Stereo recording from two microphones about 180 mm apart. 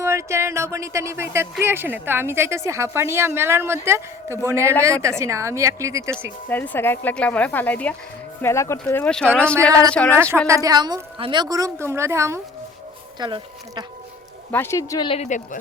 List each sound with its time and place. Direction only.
0.0 s speech: 15° right (ahead or behind)
6.5 s a woman's voice: 10° left (ahead or behind)
10.4 s a woman's voice: 15° right (ahead or behind)
14.5 s speech: 15° left (ahead or behind); by 15.4 s 35° left (ahead or behind)